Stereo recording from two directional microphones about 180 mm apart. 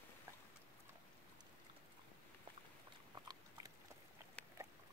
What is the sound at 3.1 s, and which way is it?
Dog, 20° right (ahead or behind).